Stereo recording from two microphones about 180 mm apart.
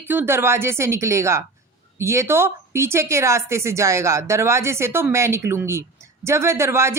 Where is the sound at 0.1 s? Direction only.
10° right (ahead or behind).